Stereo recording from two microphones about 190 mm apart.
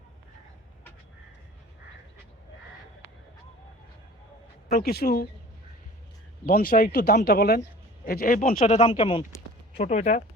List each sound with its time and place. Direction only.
4.7 s speech: 55° left (ahead or behind)
6.4 s speech: 50° left (ahead or behind)